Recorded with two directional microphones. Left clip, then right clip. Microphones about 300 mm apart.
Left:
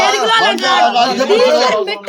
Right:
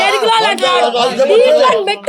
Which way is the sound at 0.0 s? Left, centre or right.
Centre.